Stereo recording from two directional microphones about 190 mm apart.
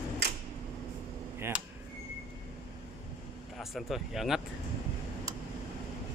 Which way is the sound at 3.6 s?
Centre (ahead or behind).